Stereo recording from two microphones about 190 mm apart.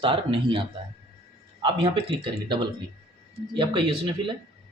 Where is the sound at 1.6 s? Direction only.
30° right (ahead or behind).